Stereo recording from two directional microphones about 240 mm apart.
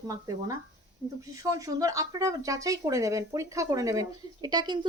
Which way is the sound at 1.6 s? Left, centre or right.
Centre.